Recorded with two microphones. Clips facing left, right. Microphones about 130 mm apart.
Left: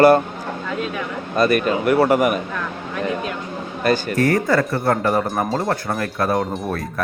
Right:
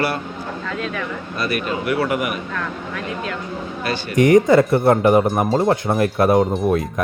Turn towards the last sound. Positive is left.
turn(degrees=0)  # may be behind; listen again after turning